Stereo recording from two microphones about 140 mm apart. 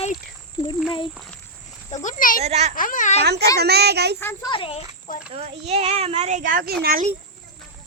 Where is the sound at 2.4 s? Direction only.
50° right (ahead or behind).